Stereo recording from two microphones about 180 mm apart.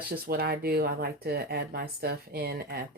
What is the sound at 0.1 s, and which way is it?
Speech, 55° right (ahead or behind).